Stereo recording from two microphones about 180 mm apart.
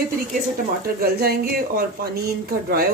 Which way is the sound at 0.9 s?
60° right (ahead or behind).